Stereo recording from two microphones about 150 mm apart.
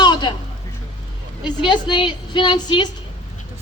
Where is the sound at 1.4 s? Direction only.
30° left (ahead or behind).